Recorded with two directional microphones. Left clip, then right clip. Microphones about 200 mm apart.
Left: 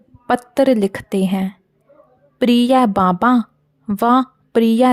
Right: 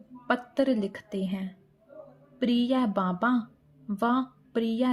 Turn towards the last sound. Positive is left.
turn(degrees=50)  # may be behind; listen again after turning